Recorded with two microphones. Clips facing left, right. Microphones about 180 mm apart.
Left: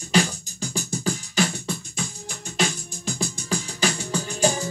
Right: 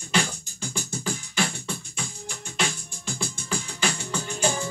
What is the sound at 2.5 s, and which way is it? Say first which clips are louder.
Music: left 4 dB; 40° left (ahead or behind).